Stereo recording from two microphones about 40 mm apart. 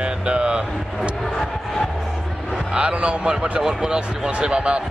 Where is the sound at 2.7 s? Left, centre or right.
Right.